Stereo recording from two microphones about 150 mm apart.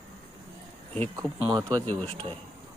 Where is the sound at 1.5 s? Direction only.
25° right (ahead or behind).